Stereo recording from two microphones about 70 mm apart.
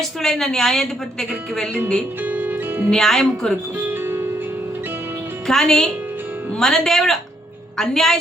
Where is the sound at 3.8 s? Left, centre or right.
Right.